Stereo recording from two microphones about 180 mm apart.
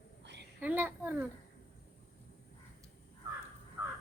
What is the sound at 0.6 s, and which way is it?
Speech, 10° right (ahead or behind).